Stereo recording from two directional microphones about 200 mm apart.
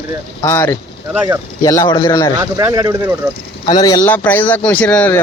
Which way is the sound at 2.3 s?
15° right (ahead or behind).